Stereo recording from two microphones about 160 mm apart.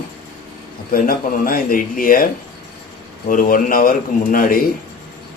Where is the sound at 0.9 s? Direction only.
60° left (ahead or behind).